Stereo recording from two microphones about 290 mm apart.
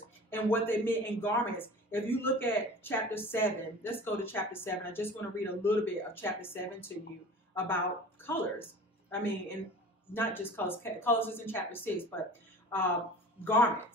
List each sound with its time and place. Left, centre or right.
0.3 s speech: centre